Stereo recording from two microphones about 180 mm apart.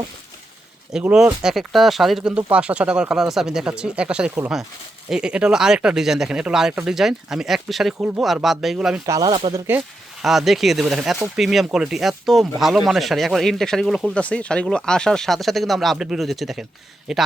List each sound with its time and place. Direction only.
0.9 s speech: 5° right (ahead or behind)
9.0 s speech: 20° right (ahead or behind)
10.2 s speech: centre (ahead or behind)